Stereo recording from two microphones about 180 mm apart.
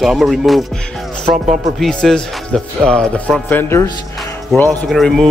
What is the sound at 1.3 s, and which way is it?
Speech, 45° right (ahead or behind).